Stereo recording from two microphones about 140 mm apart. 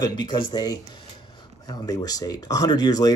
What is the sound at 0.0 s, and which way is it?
Speech, 30° left (ahead or behind).